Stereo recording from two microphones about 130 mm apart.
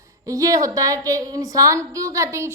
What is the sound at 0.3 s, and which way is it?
A woman's voice, 25° right (ahead or behind).